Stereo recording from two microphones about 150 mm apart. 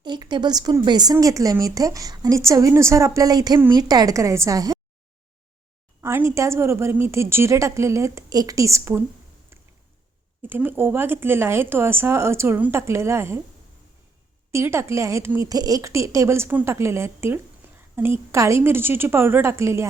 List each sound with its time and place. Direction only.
0.0 s a woman's voice: 30° right (ahead or behind)
6.0 s a woman's voice: 15° right (ahead or behind)
9.5 s a sound: 15° right (ahead or behind)
10.4 s a woman's voice: 15° right (ahead or behind)
14.5 s a woman's voice: 15° right (ahead or behind)